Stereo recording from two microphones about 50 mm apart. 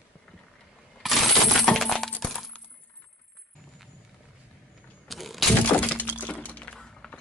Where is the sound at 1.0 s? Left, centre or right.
Centre.